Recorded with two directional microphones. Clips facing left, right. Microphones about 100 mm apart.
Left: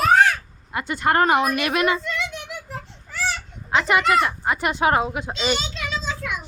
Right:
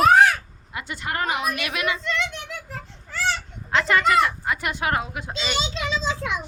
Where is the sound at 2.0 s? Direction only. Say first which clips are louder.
Right 1 dB; 10° left (ahead or behind).